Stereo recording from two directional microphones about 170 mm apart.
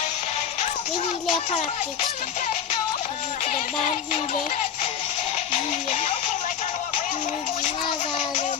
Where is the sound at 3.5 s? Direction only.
45° left (ahead or behind).